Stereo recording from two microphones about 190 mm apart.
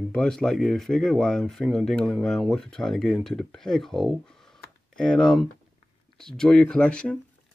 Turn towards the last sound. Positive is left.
turn(degrees=5)  # may be behind; listen again after turning